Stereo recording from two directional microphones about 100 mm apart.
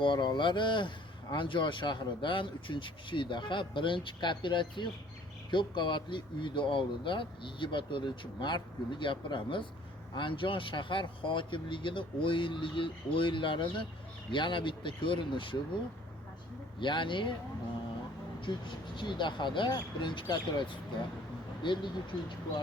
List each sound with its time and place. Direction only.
0.0 s speech: 50° left (ahead or behind)
16.8 s speech: 55° left (ahead or behind)
18.3 s speech: 55° left (ahead or behind)